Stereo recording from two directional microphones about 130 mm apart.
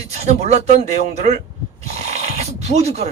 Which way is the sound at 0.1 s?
60° right (ahead or behind).